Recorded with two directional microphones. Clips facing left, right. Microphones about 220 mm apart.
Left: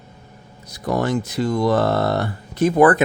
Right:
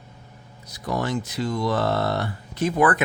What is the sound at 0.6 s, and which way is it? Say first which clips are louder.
Speech: left 5 dB; 50° left (ahead or behind).